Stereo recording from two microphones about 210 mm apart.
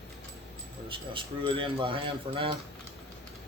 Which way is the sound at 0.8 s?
25° right (ahead or behind).